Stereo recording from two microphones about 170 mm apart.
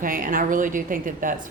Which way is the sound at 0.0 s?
55° right (ahead or behind).